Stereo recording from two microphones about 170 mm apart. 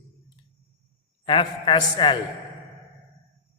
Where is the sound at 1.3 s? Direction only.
30° left (ahead or behind).